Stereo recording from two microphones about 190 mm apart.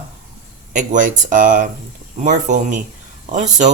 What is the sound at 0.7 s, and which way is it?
Speech, 40° right (ahead or behind).